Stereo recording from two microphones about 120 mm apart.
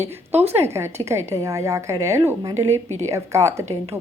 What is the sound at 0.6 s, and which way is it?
Speech, 20° right (ahead or behind).